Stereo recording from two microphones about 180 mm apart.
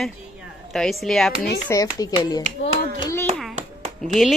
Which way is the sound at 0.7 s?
Centre (ahead or behind).